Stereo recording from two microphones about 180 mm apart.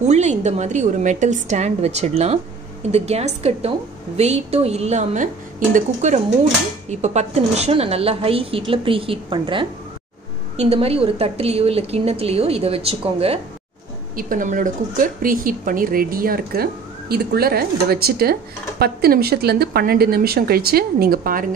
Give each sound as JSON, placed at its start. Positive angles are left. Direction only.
{"t": 0.0, "sound": "a woman's voice", "side_deg": -40}
{"t": 14.1, "sound": "speech", "side_deg": -45}